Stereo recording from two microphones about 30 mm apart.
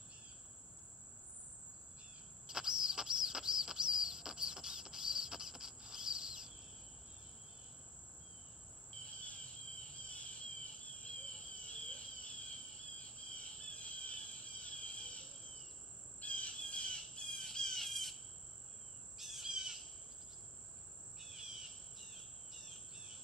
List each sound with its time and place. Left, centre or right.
2.4 s a sound: right
9.0 s insect: left
10.0 s cricket: left
13.0 s insect: left
16.6 s squawk: left
17.2 s squawk: centre
17.8 s insect: centre
19.1 s cricket: centre
21.4 s cricket: centre
21.9 s insect: centre